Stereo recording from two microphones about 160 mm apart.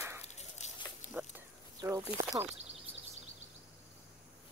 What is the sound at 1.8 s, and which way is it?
Speech, 25° right (ahead or behind).